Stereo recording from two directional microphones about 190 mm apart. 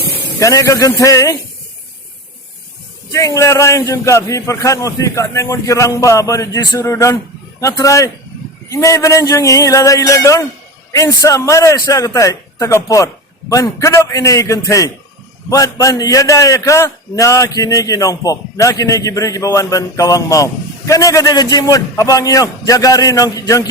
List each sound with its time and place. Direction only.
0.3 s a man's voice: 15° left (ahead or behind)
3.1 s a man's voice: 15° left (ahead or behind)